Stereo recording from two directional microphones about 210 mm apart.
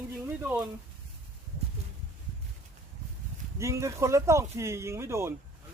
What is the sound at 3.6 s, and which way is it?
Speech, 15° right (ahead or behind).